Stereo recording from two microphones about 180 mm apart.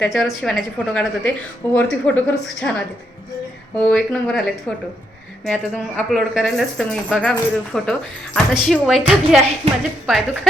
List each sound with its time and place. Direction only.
0.0 s a woman's voice: centre (ahead or behind)
3.8 s speech: 5° left (ahead or behind)
5.5 s speech: 5° left (ahead or behind)
9.6 s a woman's voice: 35° right (ahead or behind)
10.1 s speech: centre (ahead or behind)